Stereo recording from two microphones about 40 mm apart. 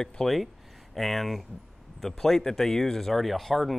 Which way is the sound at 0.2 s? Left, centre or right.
Centre.